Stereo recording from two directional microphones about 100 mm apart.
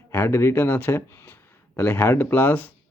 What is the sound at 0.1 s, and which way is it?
Speech, 25° left (ahead or behind).